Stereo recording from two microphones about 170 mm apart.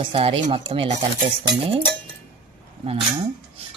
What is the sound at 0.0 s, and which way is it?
Speech, 35° right (ahead or behind).